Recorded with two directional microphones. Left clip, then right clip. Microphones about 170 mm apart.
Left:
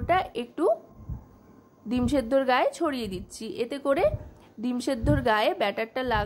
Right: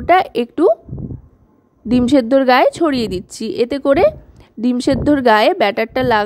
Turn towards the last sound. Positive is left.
turn(degrees=-45)  # may be behind; listen again after turning